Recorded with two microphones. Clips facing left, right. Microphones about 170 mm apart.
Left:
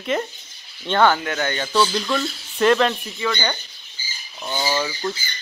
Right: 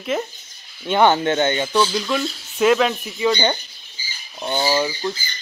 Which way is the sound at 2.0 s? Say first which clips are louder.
Right 1 dB; 5° right (ahead or behind).